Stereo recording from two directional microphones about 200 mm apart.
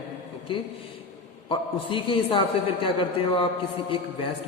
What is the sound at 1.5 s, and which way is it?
A man's voice, 25° left (ahead or behind).